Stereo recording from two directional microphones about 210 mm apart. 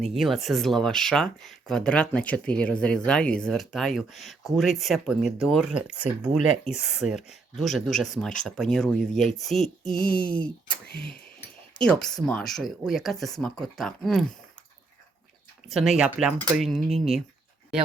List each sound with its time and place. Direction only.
0.0 s speech: centre (ahead or behind)
9.8 s a sound: 40° left (ahead or behind)
10.1 s speech: 5° left (ahead or behind)
11.9 s speech: 5° left (ahead or behind)
15.7 s speech: centre (ahead or behind)